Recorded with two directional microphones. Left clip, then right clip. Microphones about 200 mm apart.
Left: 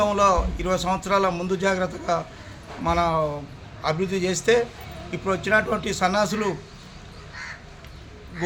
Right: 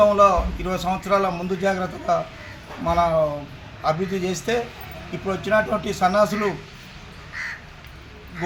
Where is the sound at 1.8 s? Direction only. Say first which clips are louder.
Even; 30° left (ahead or behind).